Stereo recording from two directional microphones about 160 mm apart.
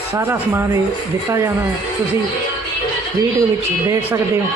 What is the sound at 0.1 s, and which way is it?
A man's voice, 15° right (ahead or behind).